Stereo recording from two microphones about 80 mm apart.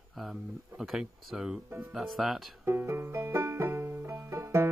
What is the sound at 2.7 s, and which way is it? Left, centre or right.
Music, right.